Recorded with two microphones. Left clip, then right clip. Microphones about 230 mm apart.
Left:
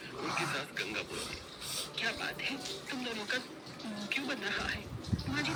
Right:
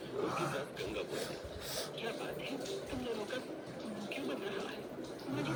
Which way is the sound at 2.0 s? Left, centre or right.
Left.